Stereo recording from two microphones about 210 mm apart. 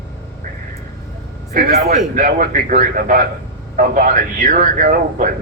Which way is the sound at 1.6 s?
35° right (ahead or behind).